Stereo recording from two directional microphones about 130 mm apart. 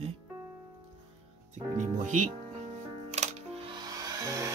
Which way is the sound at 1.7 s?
70° right (ahead or behind).